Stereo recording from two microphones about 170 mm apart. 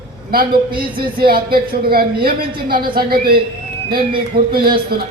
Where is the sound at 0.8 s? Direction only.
60° right (ahead or behind).